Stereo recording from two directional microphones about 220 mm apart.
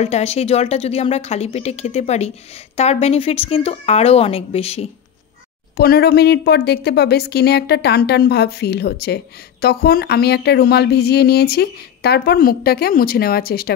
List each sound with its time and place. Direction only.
0.0 s a woman's voice: 30° left (ahead or behind)
5.8 s a woman's voice: 45° left (ahead or behind)